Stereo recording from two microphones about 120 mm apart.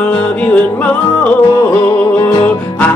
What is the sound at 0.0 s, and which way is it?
Music, 10° left (ahead or behind).